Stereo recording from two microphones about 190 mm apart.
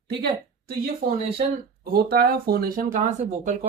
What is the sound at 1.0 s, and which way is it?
Speech, 50° right (ahead or behind).